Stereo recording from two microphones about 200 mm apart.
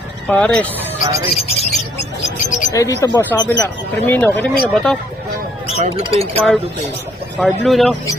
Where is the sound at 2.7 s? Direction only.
15° left (ahead or behind).